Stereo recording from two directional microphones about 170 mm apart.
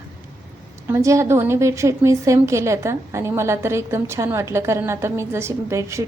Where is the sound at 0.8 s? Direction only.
15° right (ahead or behind).